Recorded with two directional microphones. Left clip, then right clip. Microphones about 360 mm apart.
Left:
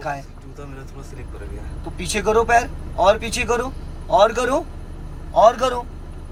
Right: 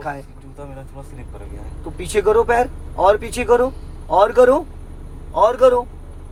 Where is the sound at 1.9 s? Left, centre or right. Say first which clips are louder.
Right 3 dB; centre.